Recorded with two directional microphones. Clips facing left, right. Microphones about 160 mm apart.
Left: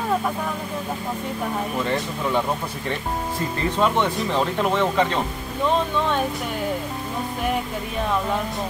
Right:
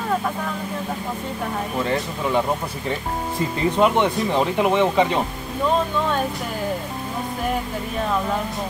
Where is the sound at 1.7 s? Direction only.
5° right (ahead or behind).